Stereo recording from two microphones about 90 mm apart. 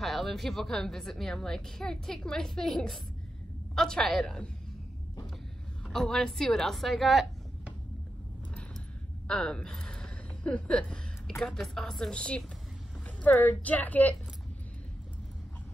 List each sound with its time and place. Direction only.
0.0 s a woman's voice: centre (ahead or behind)
5.9 s a woman's voice: 5° left (ahead or behind)
9.3 s a woman's voice: 10° left (ahead or behind)